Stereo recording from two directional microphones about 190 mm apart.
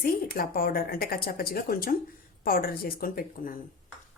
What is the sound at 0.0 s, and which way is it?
Speech, 50° left (ahead or behind).